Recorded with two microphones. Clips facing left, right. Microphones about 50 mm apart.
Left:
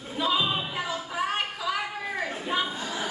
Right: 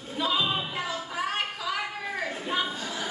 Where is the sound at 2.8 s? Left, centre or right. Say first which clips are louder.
Left 2 dB; centre.